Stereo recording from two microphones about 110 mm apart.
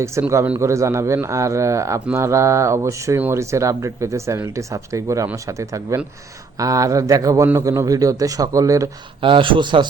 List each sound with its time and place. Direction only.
0.0 s a man's voice: 25° right (ahead or behind)
9.2 s a man's voice: 50° right (ahead or behind)